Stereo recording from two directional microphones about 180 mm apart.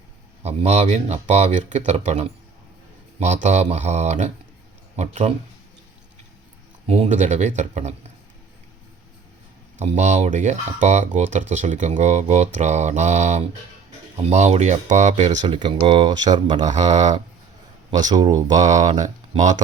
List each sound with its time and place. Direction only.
0.4 s speech: 35° right (ahead or behind)
3.4 s speech: 40° right (ahead or behind)
6.8 s speech: 35° right (ahead or behind)
9.7 s speech: 40° right (ahead or behind)
15.4 s speech: 25° right (ahead or behind)
18.1 s speech: 20° right (ahead or behind)
18.5 s speech: 40° right (ahead or behind)